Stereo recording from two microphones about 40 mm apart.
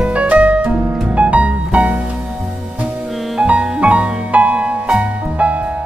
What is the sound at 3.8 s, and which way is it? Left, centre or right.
Music, right.